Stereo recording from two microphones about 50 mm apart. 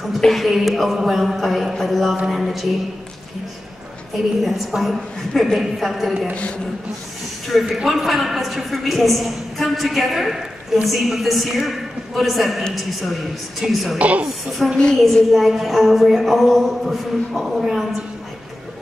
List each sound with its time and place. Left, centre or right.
0.2 s a woman's voice: centre
4.4 s a woman's voice: centre
7.4 s a woman's voice: centre
13.9 s a woman's voice: right
14.6 s a woman's voice: centre